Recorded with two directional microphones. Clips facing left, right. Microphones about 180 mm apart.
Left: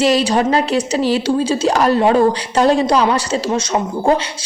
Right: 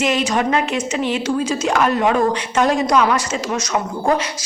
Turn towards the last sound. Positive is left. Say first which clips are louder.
# left 3 dB
turn(degrees=30)  # may be behind; listen again after turning